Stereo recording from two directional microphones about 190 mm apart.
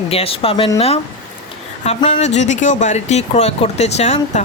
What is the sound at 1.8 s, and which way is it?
A man's voice, 35° left (ahead or behind).